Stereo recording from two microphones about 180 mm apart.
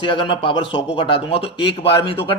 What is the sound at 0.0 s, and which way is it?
A man's voice, 30° left (ahead or behind).